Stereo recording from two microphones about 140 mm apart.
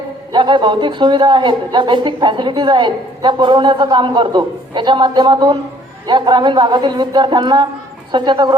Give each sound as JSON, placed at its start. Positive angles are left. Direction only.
{"t": 0.3, "sound": "a woman's voice", "side_deg": -35}